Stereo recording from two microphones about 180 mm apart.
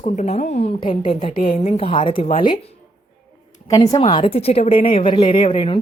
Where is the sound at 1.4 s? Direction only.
40° left (ahead or behind).